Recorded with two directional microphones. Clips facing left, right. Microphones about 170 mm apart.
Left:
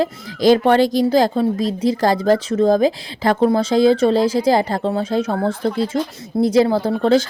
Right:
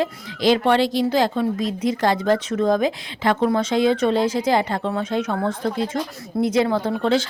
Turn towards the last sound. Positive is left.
turn(degrees=35)  # may be behind; listen again after turning